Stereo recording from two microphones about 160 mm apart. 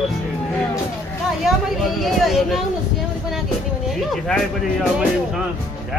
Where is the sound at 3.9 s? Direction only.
Centre (ahead or behind).